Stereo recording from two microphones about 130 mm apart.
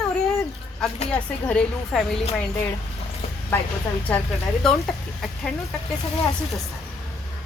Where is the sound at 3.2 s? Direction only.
50° left (ahead or behind).